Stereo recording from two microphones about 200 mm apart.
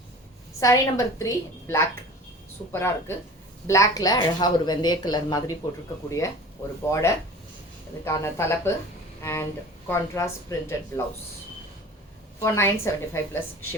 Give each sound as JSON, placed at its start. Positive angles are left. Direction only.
{"t": 0.6, "sound": "speech", "side_deg": 15}
{"t": 12.4, "sound": "speech", "side_deg": 15}